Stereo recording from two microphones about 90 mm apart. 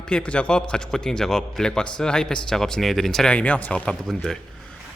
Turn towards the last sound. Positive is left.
turn(degrees=5)  # may be behind; listen again after turning